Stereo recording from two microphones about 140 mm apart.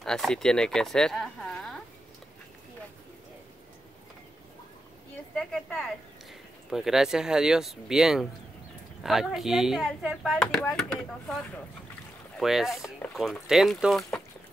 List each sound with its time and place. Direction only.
0.0 s speech: 5° left (ahead or behind)
5.3 s a woman's voice: 5° left (ahead or behind)